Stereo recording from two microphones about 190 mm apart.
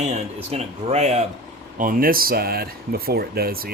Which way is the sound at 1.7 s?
50° right (ahead or behind).